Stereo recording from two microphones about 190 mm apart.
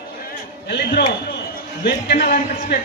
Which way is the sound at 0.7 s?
60° left (ahead or behind).